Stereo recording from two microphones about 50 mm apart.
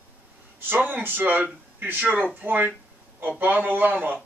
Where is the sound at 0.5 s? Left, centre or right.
Right.